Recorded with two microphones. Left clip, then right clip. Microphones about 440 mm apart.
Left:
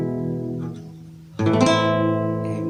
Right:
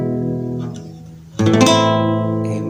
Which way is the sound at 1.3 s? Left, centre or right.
Left.